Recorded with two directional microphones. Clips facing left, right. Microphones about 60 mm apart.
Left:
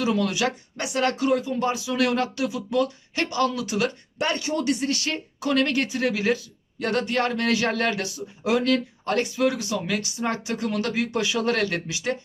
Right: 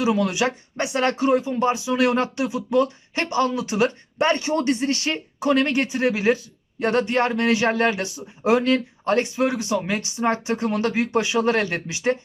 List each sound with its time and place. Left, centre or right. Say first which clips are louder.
0.0 s speech: right 3 dB; centre